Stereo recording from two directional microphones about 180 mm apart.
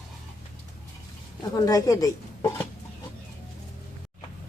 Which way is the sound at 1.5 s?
20° left (ahead or behind).